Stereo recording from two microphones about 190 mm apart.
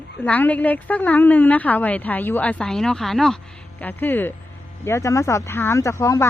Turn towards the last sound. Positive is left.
turn(degrees=15)  # may be behind; listen again after turning